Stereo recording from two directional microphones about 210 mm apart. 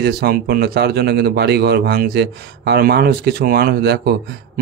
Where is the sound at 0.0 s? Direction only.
45° right (ahead or behind).